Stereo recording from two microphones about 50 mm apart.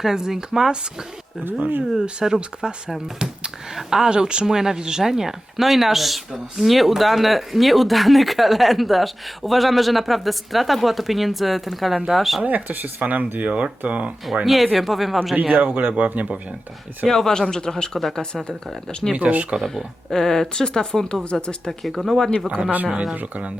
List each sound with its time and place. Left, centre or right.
0.0 s speech: centre
1.5 s speech: right
2.1 s speech: centre
12.4 s speech: right
14.4 s speech: centre
15.6 s speech: right
17.1 s speech: centre
19.1 s speech: right
19.5 s speech: centre
21.7 s speech: centre
23.1 s speech: right